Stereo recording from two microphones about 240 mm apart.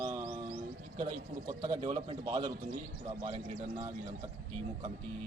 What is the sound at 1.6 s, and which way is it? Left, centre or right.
A man's voice, right.